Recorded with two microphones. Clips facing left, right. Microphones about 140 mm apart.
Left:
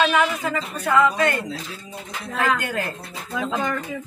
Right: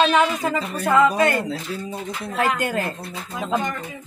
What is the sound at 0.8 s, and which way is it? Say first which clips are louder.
Speech: right 2 dB; 15° right (ahead or behind).